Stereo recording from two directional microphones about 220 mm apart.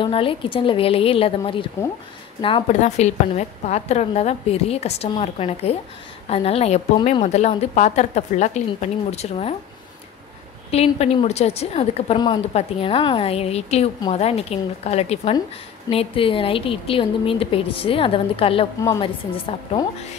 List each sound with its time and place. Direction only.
0.0 s a woman's voice: 25° left (ahead or behind)
10.7 s a woman's voice: 30° left (ahead or behind)